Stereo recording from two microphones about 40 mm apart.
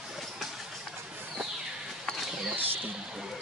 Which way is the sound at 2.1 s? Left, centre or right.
Centre.